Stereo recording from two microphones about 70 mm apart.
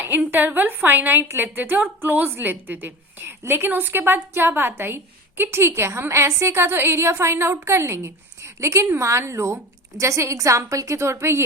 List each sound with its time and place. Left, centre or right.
0.3 s a woman's voice: right